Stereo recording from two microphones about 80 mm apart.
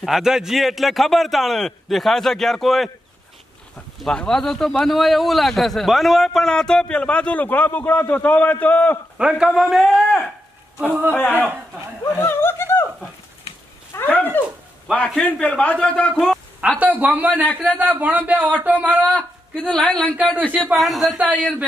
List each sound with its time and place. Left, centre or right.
0.0 s a man's voice: centre
4.0 s a man's voice: centre
9.2 s a man's voice: centre
10.9 s speech: right
12.2 s speech: left
14.0 s dog: left
15.2 s a man's voice: centre
17.0 s speech: right
17.3 s speech: left
17.7 s speech: right
19.0 s a man's voice: centre
20.7 s a man's voice: centre
21.2 s speech: right